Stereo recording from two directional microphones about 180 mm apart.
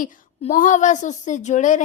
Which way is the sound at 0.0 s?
50° left (ahead or behind).